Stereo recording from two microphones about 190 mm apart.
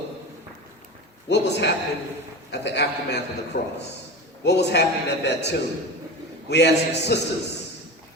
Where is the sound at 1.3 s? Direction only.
65° left (ahead or behind).